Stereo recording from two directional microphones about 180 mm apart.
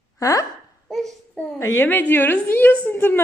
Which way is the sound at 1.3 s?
5° left (ahead or behind).